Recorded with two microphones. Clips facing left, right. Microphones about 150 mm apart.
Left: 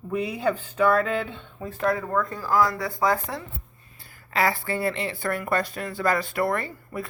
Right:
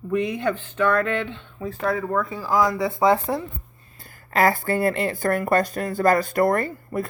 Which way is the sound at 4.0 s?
45° right (ahead or behind).